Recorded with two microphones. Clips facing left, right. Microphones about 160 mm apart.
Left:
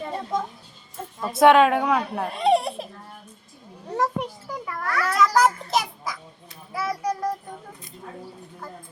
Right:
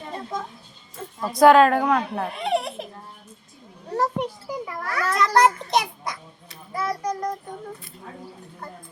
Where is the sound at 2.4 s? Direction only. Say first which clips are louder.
Left 5 dB; 35° left (ahead or behind).